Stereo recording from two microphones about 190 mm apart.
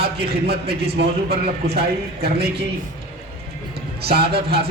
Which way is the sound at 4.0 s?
55° right (ahead or behind).